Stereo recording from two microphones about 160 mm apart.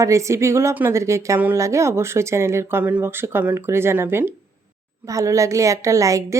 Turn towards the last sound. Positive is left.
turn(degrees=-20)  # may be behind; listen again after turning